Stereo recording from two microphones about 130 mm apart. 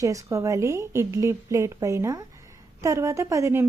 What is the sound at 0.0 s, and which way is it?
Speech, 25° right (ahead or behind).